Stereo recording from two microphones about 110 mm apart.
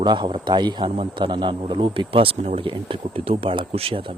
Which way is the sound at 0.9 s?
55° right (ahead or behind).